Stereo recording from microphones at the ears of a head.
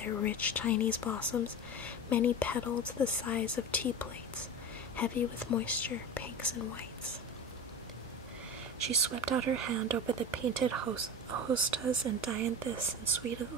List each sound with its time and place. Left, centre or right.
0.0 s speech: left
8.8 s speech: right